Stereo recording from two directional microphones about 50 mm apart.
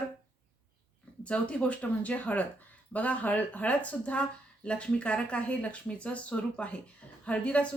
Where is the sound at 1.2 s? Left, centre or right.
Left.